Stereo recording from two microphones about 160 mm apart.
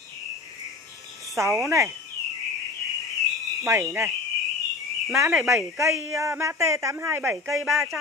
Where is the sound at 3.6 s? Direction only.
20° right (ahead or behind).